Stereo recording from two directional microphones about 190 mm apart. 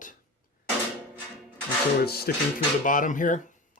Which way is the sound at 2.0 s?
55° left (ahead or behind).